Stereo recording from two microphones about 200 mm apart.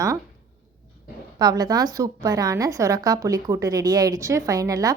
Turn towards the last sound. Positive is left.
turn(degrees=-15)  # may be behind; listen again after turning